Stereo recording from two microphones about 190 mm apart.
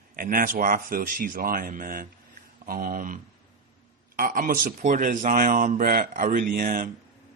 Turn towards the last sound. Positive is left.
turn(degrees=-45)  # may be behind; listen again after turning